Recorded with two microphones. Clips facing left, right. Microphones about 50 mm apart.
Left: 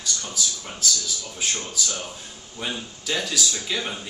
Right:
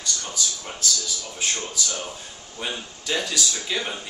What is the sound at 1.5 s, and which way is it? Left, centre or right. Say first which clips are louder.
Speech: even; centre.